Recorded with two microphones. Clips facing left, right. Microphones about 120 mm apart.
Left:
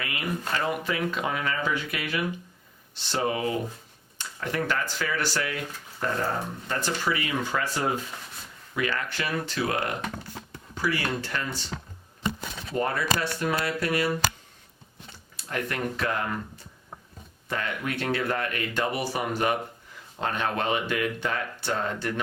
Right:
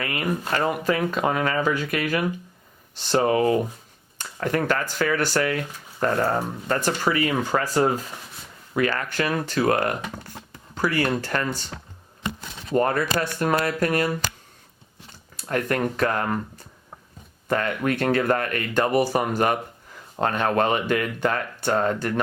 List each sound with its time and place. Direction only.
0.0 s speech: 50° right (ahead or behind)
12.7 s speech: 50° right (ahead or behind)
15.4 s speech: 50° right (ahead or behind)
17.5 s speech: 50° right (ahead or behind)